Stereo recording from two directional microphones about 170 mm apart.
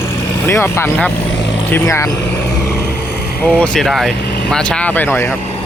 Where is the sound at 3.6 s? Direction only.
Centre (ahead or behind).